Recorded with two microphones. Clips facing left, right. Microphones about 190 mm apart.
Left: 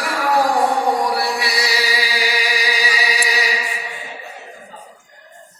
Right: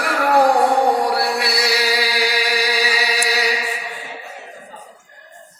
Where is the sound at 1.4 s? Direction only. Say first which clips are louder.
Right 2 dB; 60° right (ahead or behind).